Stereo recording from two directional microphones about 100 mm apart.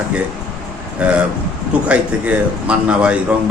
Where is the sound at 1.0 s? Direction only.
10° right (ahead or behind).